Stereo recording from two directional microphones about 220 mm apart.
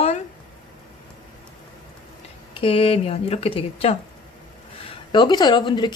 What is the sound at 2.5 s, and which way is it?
Speech, 25° left (ahead or behind).